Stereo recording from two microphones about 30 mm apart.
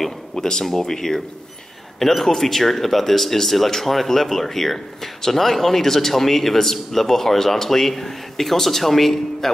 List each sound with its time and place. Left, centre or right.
0.4 s speech: centre